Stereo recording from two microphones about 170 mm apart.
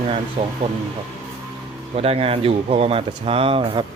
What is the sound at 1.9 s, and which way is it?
Speech, 35° right (ahead or behind).